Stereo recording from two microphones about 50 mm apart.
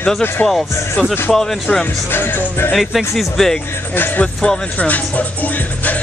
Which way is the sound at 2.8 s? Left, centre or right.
Centre.